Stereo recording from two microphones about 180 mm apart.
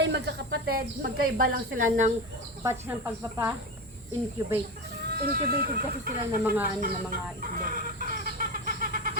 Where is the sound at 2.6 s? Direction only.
15° right (ahead or behind).